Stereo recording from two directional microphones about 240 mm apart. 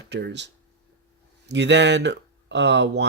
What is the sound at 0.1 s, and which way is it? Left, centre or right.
Speech, right.